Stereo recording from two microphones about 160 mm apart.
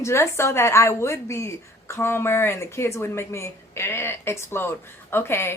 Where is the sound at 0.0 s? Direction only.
15° left (ahead or behind).